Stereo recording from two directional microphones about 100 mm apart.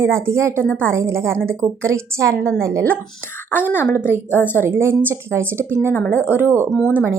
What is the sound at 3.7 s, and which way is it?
Speech, 20° left (ahead or behind).